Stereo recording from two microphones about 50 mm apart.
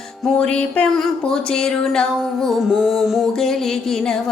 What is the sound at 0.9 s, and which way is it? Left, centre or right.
Music, centre.